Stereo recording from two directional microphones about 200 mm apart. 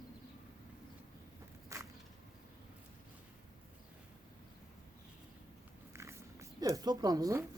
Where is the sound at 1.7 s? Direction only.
15° right (ahead or behind).